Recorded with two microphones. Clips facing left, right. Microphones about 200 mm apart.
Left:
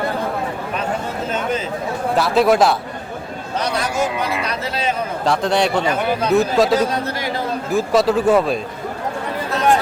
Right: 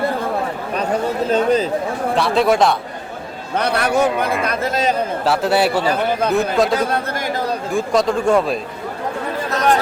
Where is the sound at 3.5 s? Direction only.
60° right (ahead or behind).